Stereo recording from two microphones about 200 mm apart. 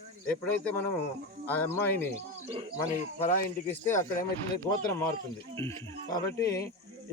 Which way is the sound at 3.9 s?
40° left (ahead or behind).